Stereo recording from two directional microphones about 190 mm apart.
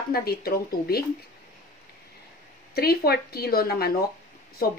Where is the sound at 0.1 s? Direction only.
55° left (ahead or behind).